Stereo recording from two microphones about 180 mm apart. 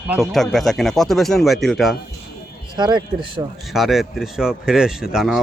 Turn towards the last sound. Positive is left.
turn(degrees=-5)  # may be behind; listen again after turning